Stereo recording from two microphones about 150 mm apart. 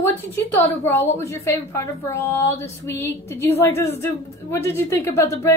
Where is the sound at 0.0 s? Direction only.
15° left (ahead or behind).